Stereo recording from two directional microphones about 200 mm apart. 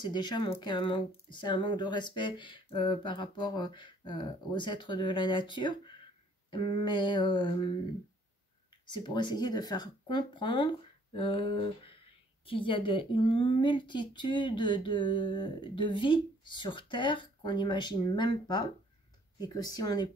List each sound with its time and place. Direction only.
0.0 s a woman's voice: 20° left (ahead or behind)
8.9 s a woman's voice: 20° left (ahead or behind)